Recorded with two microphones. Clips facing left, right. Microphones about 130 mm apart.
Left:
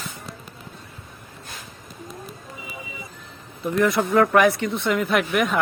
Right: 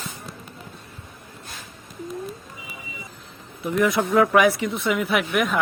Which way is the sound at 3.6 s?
5° right (ahead or behind).